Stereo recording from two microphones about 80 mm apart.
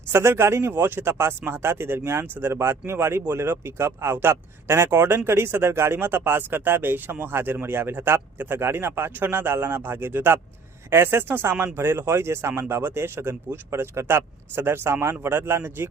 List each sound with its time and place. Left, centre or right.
0.1 s speech: right